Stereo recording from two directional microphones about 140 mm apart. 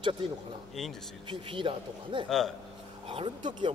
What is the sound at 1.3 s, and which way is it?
A man's voice, 40° right (ahead or behind).